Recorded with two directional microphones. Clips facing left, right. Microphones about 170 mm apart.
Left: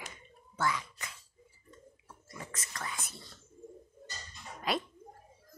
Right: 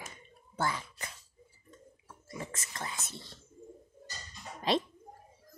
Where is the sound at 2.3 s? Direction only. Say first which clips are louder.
Right 3 dB; 25° right (ahead or behind).